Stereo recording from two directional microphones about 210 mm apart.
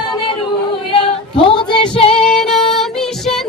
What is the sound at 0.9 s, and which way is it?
Female singing, 25° left (ahead or behind).